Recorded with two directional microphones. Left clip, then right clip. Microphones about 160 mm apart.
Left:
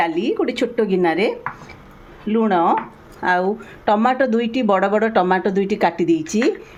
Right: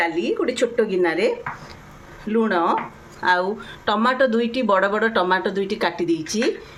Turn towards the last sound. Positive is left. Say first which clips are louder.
# left 4 dB
turn(degrees=50)  # may be behind; listen again after turning